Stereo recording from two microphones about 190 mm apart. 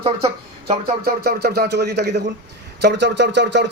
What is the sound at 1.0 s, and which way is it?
Speech, 55° right (ahead or behind).